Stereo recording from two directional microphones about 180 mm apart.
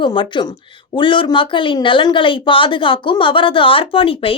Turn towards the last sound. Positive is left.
turn(degrees=30)  # may be behind; listen again after turning